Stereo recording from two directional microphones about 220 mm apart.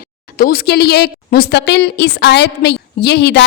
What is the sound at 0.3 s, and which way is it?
A woman's voice, 40° left (ahead or behind).